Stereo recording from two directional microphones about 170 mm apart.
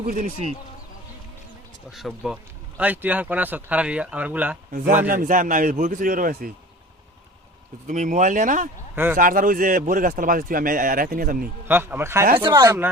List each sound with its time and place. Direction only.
0.0 s a man's voice: 55° right (ahead or behind)
1.9 s speech: centre (ahead or behind)
5.0 s a man's voice: 55° right (ahead or behind)
7.9 s a man's voice: 45° right (ahead or behind)
11.7 s speech: 10° right (ahead or behind)
12.4 s speech: 25° right (ahead or behind)